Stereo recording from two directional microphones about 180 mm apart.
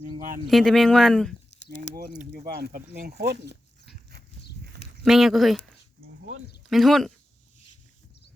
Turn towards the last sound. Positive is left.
turn(degrees=0)  # may be behind; listen again after turning